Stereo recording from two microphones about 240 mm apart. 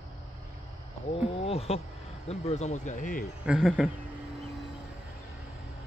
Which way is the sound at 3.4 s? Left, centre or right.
Centre.